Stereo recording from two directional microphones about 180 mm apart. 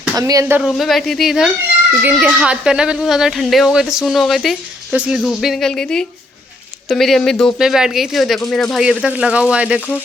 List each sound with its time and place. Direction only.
0.2 s speech: 20° right (ahead or behind)
0.7 s speech: centre (ahead or behind)